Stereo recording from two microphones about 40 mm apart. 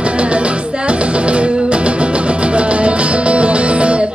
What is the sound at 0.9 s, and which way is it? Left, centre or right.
Music, right.